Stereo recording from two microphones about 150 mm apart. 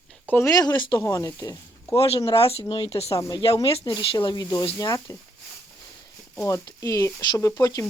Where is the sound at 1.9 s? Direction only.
40° left (ahead or behind); by 5.2 s 25° left (ahead or behind).